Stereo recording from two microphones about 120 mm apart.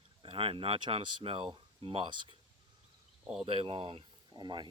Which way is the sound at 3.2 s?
5° right (ahead or behind).